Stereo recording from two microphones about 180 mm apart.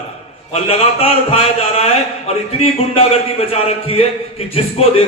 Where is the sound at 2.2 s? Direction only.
35° left (ahead or behind).